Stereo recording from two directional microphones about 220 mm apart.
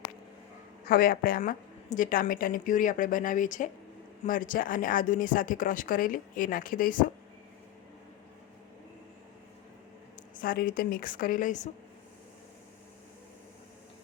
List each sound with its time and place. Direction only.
0.9 s a woman's voice: 40° left (ahead or behind)
10.3 s a woman's voice: 40° left (ahead or behind)